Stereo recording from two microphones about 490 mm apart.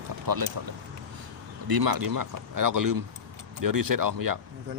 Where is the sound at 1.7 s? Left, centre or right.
Right.